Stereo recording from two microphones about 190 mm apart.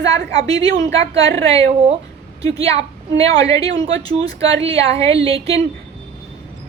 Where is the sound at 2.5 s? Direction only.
30° right (ahead or behind).